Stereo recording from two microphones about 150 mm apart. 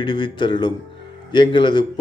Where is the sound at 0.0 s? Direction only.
30° left (ahead or behind).